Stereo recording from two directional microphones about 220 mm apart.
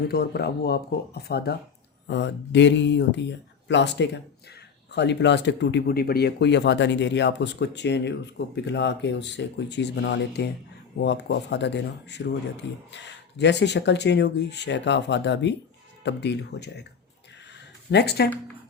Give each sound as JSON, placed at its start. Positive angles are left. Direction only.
{"t": 0.1, "sound": "speech", "side_deg": 45}
{"t": 17.9, "sound": "speech", "side_deg": 50}